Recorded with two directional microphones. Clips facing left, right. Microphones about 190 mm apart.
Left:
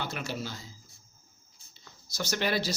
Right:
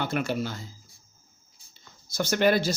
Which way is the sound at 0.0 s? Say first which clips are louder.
Right 7 dB; 55° right (ahead or behind).